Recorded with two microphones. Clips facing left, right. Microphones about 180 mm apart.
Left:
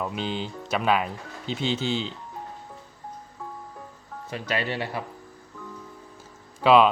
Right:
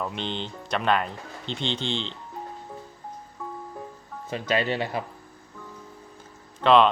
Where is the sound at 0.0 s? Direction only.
5° left (ahead or behind).